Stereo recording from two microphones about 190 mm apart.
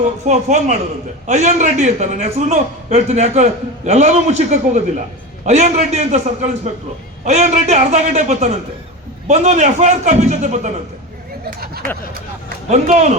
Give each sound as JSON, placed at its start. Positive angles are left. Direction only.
{"t": 0.3, "sound": "a man's voice", "side_deg": -40}
{"t": 11.6, "sound": "speech", "side_deg": -55}
{"t": 12.6, "sound": "a man's voice", "side_deg": -35}